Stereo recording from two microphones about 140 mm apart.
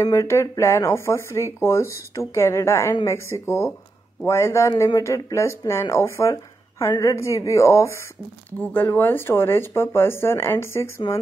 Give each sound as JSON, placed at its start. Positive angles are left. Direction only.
{"t": 0.0, "sound": "speech", "side_deg": 20}